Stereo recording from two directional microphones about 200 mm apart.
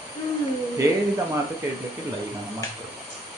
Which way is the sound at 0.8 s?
15° right (ahead or behind).